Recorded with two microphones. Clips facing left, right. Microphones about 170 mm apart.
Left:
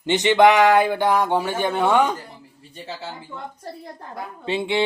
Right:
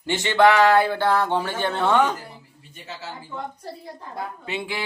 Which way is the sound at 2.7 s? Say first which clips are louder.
Left 4 dB; 30° left (ahead or behind).